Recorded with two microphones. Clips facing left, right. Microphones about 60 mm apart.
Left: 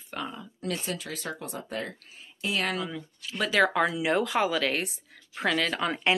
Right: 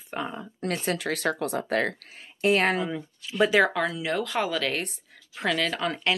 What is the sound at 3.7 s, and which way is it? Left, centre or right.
Speech, centre.